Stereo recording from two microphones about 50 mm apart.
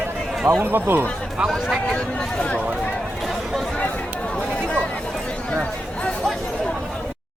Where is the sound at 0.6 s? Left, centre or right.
Right.